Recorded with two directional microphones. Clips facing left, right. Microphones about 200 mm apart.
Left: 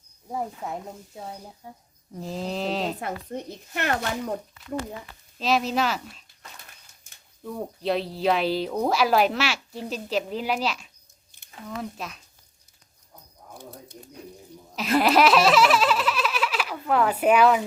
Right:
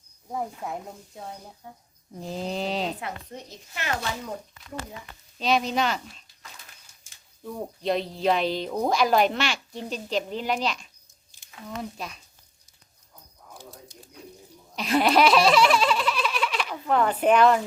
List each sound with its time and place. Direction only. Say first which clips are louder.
0.6 s speech: left 1 dB; centre (ahead or behind)
3.0 s speech: left 5 dB; 55° left (ahead or behind)
5.4 s speech: even; centre (ahead or behind)
7.4 s speech: left 1 dB; centre (ahead or behind)
11.3 s a sound: left 1 dB; 60° left (ahead or behind)
11.8 s speech: even; centre (ahead or behind)
13.6 s bird: left 3 dB; 55° left (ahead or behind)
14.8 s baby laughter: left 1 dB; centre (ahead or behind)